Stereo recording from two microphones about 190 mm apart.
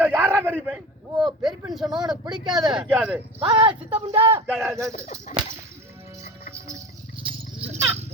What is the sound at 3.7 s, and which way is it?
Speech, 5° right (ahead or behind).